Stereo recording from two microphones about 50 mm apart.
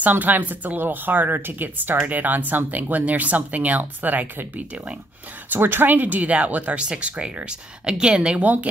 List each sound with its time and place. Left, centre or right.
0.0 s speech: right